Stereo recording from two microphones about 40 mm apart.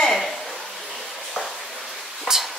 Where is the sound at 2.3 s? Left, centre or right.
Centre.